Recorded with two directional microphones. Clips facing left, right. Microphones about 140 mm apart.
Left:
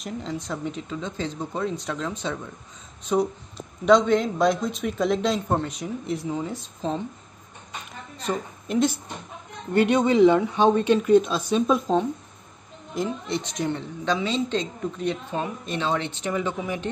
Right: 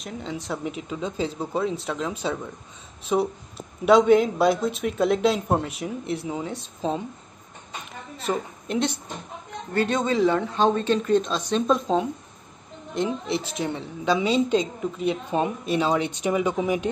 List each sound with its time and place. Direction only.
0.0 s speech: centre (ahead or behind)
8.2 s a woman's voice: centre (ahead or behind)
9.8 s a woman's voice: 15° left (ahead or behind); by 16.9 s 15° right (ahead or behind)